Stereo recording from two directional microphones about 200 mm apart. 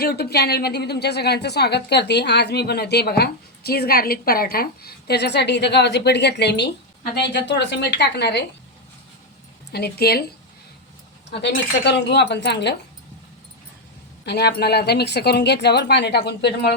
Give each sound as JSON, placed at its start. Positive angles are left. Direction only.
{"t": 0.0, "sound": "a woman's voice", "side_deg": 55}
{"t": 9.7, "sound": "speech", "side_deg": 55}
{"t": 11.3, "sound": "a woman's voice", "side_deg": 60}
{"t": 14.3, "sound": "a woman's voice", "side_deg": 55}